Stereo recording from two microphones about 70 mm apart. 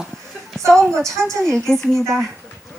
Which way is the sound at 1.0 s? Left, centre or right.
Right.